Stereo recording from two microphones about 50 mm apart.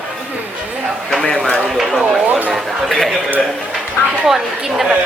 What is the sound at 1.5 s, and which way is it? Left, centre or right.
Speech, centre.